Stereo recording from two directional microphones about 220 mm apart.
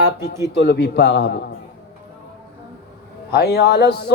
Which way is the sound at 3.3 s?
45° left (ahead or behind).